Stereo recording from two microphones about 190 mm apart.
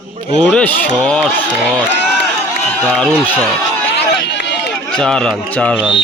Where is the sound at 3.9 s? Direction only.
65° left (ahead or behind).